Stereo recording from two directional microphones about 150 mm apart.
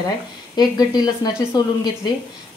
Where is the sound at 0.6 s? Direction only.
25° left (ahead or behind).